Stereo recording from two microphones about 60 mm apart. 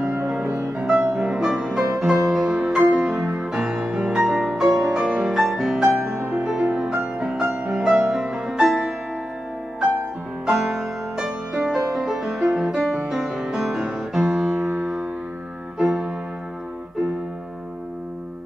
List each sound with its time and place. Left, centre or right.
0.0 s music: right
0.7 s music: centre
10.4 s music: centre
15.8 s piano: centre